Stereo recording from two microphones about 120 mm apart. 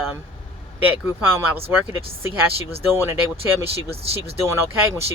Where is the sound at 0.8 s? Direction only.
15° right (ahead or behind).